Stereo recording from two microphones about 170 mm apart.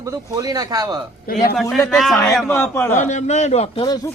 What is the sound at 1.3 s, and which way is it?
Speech, 60° left (ahead or behind).